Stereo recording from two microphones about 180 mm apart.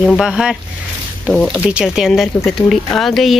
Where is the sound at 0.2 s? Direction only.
5° right (ahead or behind).